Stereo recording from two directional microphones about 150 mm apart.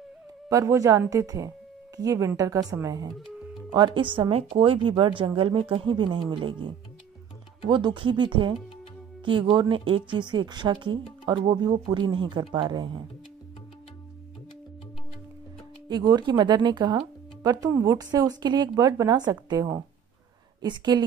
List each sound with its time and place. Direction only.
0.5 s a woman's voice: 20° right (ahead or behind)
15.9 s speech: 25° right (ahead or behind)